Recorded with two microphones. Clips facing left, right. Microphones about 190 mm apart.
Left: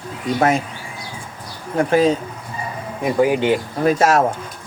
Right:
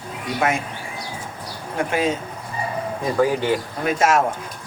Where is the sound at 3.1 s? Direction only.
15° left (ahead or behind).